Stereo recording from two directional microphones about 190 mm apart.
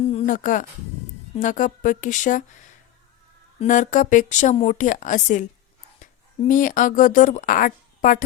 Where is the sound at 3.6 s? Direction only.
40° left (ahead or behind).